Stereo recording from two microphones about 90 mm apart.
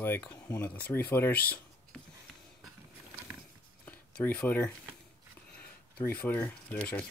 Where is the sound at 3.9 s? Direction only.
15° left (ahead or behind).